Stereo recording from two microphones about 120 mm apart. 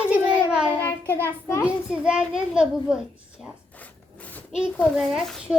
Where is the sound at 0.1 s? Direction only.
10° right (ahead or behind).